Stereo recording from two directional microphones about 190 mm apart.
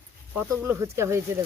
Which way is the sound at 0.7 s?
15° right (ahead or behind).